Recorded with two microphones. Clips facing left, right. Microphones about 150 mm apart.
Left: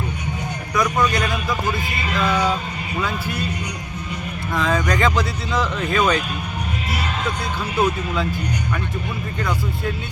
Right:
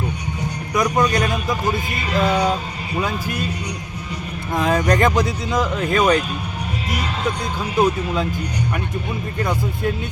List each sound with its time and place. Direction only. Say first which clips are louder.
0.7 s a sound: right 2 dB; 20° right (ahead or behind)
1.2 s a man's voice: right 2 dB; 20° right (ahead or behind)
4.7 s speech: right 4 dB; 35° right (ahead or behind)
4.9 s speech: right 2 dB; 20° right (ahead or behind)
7.8 s speech: right 3 dB; 15° right (ahead or behind)